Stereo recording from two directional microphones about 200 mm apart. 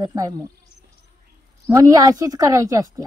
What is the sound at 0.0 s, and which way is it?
Speech, 20° right (ahead or behind).